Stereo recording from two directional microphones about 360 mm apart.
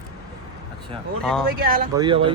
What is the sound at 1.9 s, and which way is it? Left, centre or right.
Speech, centre.